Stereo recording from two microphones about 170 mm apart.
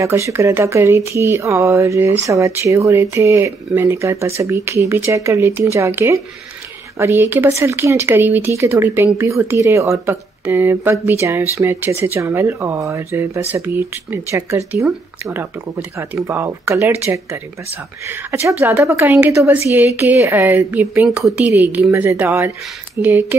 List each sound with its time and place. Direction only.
0.0 s speech: 15° right (ahead or behind)
16.3 s speech: 15° right (ahead or behind)